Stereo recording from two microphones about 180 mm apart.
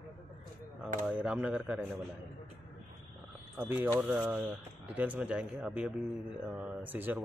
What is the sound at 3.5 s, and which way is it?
Speech, 10° right (ahead or behind).